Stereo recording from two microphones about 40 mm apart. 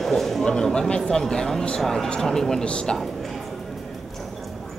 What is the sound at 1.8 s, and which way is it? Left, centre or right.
Speech, centre.